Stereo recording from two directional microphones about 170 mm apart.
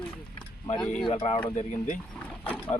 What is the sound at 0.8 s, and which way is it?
Speech, 5° left (ahead or behind).